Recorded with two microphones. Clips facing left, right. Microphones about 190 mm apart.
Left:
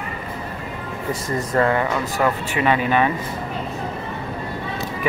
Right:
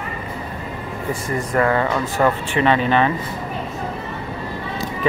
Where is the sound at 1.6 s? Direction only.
25° left (ahead or behind).